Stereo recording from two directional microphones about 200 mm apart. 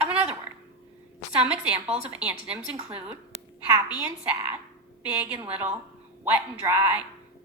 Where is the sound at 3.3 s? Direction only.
30° right (ahead or behind).